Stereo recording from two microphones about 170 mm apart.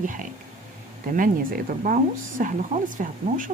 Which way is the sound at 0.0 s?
50° right (ahead or behind).